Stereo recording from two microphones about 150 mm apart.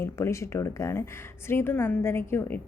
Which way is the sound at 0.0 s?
20° left (ahead or behind).